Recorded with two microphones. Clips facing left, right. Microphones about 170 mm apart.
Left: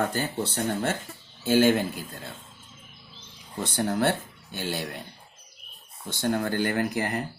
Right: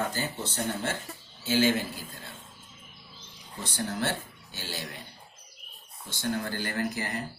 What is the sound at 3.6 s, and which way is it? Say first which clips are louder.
Speech: left 7 dB; 55° left (ahead or behind).